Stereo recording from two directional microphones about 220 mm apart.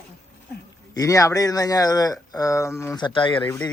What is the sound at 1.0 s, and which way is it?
Speech, 15° left (ahead or behind).